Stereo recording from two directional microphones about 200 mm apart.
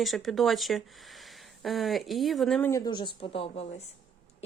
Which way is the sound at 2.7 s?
15° left (ahead or behind).